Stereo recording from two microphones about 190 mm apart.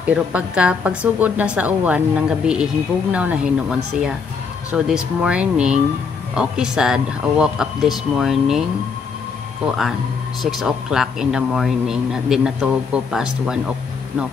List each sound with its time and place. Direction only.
0.1 s a woman's voice: 5° right (ahead or behind)
10.4 s speech: centre (ahead or behind)